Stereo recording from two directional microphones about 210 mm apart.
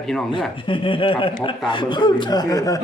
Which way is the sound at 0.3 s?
25° left (ahead or behind).